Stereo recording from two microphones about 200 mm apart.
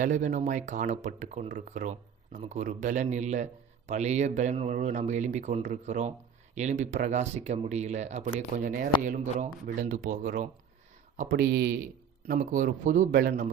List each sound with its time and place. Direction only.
0.0 s speech: 40° right (ahead or behind)
12.3 s speech: 40° right (ahead or behind)